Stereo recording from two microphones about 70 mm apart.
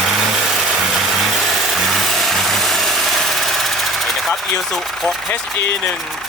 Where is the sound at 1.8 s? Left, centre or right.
Centre.